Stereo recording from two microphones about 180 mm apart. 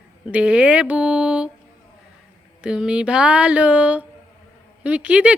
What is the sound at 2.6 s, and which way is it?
Speech, 5° right (ahead or behind).